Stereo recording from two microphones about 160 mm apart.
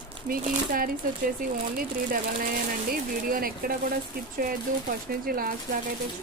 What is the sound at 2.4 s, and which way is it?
Speech, 65° right (ahead or behind).